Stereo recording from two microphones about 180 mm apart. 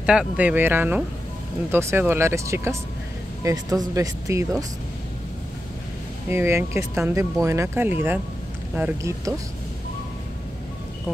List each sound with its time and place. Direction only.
0.0 s speech: 5° right (ahead or behind)
6.3 s speech: 15° right (ahead or behind)